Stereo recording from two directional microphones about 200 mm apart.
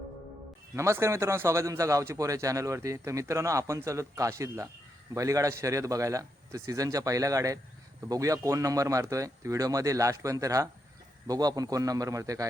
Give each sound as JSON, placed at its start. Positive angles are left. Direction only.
{"t": 0.8, "sound": "a man's voice", "side_deg": -15}